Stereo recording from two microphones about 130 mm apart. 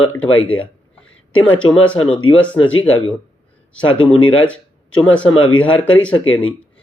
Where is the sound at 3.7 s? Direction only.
10° left (ahead or behind).